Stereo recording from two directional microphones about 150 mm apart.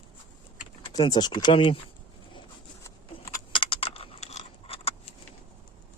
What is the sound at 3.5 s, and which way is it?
Keys jangling, 35° left (ahead or behind).